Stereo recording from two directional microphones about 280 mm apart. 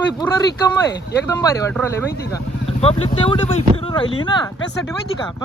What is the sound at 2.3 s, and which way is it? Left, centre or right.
Speech, left.